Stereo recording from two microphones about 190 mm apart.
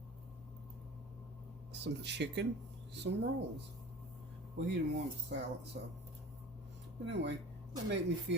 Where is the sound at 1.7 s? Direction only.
65° right (ahead or behind).